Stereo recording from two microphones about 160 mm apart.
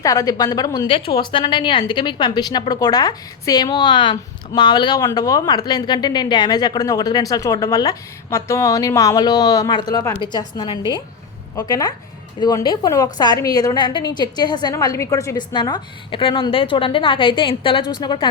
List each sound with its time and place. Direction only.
0.0 s a woman's voice: 20° left (ahead or behind)
0.9 s a woman's voice: 35° left (ahead or behind)